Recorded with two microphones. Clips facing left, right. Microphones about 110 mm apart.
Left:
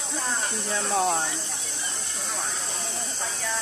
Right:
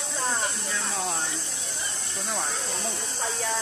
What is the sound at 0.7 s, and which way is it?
Speech, 30° left (ahead or behind).